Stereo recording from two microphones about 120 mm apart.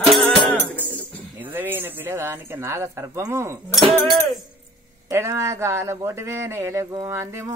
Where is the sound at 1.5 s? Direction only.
15° right (ahead or behind).